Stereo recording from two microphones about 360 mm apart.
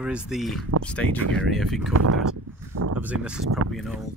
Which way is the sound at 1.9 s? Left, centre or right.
Right.